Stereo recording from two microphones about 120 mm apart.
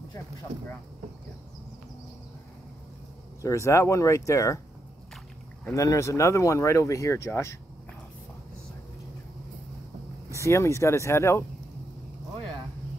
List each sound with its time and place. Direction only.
3.4 s speech: 25° left (ahead or behind)
5.8 s speech: 25° left (ahead or behind)
10.4 s speech: 25° left (ahead or behind)